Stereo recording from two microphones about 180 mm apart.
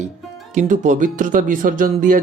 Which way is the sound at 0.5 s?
45° right (ahead or behind).